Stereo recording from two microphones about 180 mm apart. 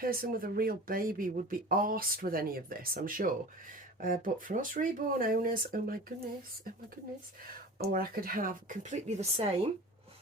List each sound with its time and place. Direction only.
0.0 s speech: 55° right (ahead or behind)
7.4 s speech: 55° right (ahead or behind); by 9.5 s 35° right (ahead or behind)